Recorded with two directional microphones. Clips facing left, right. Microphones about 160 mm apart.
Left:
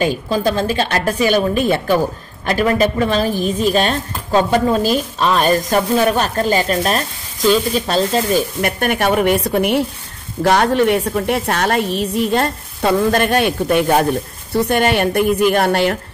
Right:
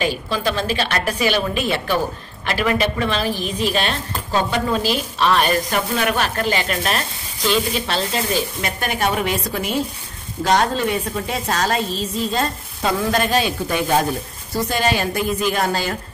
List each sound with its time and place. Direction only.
0.0 s a woman's voice: 45° left (ahead or behind); by 16.0 s 65° left (ahead or behind)